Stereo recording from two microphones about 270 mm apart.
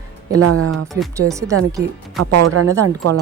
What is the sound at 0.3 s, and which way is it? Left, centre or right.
Speech, right.